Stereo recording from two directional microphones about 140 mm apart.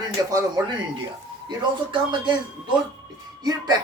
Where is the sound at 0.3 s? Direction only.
25° right (ahead or behind).